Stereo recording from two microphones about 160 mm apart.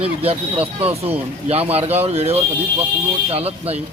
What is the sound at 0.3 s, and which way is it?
Speech, 35° right (ahead or behind).